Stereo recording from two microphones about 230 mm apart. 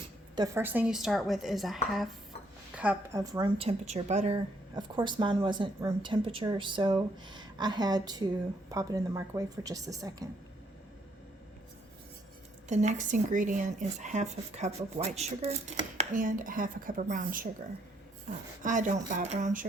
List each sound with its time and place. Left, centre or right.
0.3 s a woman's voice: centre; by 4.4 s right
4.7 s a woman's voice: centre
12.6 s speech: right
18.6 s speech: right